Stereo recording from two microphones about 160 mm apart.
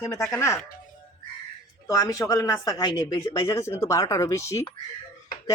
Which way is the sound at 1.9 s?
20° left (ahead or behind).